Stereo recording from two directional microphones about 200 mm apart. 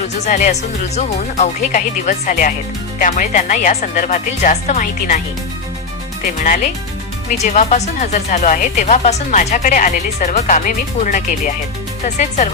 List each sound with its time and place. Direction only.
0.3 s speech: 40° left (ahead or behind)
6.4 s speech: 40° left (ahead or behind)